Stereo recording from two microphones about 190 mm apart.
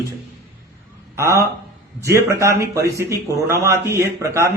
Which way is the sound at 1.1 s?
15° right (ahead or behind).